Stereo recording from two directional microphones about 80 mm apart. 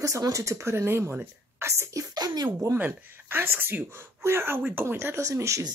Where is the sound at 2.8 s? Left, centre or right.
Right.